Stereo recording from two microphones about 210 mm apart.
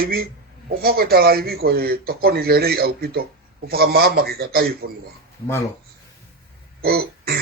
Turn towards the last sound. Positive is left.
turn(degrees=-45)  # may be behind; listen again after turning